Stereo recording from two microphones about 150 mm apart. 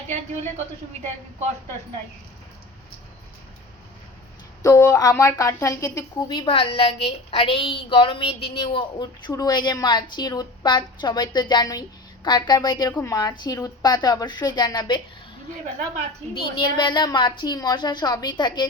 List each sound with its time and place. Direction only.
4.6 s speech: 25° left (ahead or behind)
16.3 s speech: 30° left (ahead or behind)